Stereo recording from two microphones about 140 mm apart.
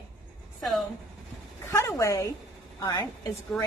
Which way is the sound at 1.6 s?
20° left (ahead or behind).